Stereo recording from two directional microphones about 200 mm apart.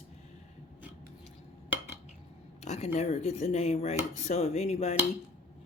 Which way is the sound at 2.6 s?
35° left (ahead or behind).